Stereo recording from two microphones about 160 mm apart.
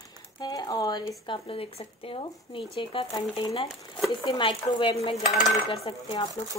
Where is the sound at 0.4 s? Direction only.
25° left (ahead or behind).